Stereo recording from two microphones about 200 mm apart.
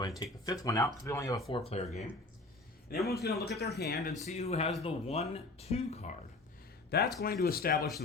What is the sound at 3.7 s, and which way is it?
Speech, 55° left (ahead or behind).